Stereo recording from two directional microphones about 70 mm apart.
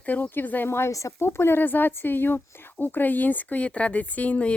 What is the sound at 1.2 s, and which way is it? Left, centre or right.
A woman's voice, left.